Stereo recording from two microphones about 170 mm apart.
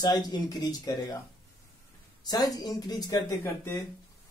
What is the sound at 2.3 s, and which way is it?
A man's voice, 20° left (ahead or behind).